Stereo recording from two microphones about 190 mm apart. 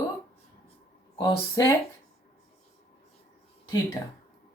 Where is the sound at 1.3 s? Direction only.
20° left (ahead or behind).